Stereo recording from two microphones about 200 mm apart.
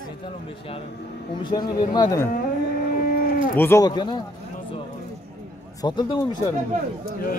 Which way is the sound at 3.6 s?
15° left (ahead or behind).